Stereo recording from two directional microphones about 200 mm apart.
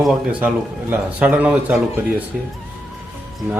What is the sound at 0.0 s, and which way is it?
A man's voice, 5° right (ahead or behind).